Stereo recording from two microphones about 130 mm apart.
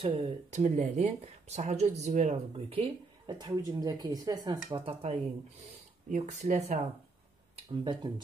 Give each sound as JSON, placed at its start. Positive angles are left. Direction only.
{"t": 0.0, "sound": "speech", "side_deg": -50}
{"t": 2.5, "sound": "speech", "side_deg": -45}
{"t": 3.3, "sound": "speech", "side_deg": -30}
{"t": 6.1, "sound": "speech", "side_deg": -60}
{"t": 7.8, "sound": "speech", "side_deg": -35}